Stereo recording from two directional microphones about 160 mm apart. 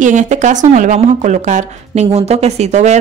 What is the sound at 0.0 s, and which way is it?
A woman's voice, 50° right (ahead or behind).